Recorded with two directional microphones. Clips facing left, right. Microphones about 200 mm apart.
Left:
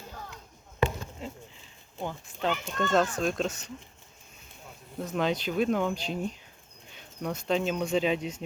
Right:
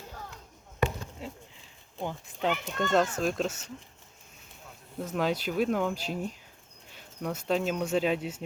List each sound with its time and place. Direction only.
2.0 s a child's voice: 10° right (ahead or behind)
4.9 s speech: 5° right (ahead or behind)